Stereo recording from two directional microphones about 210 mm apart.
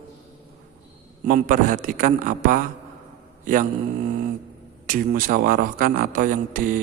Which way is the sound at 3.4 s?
40° right (ahead or behind).